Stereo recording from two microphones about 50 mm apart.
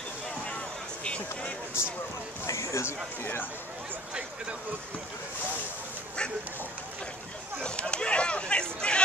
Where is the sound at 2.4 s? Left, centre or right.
Left.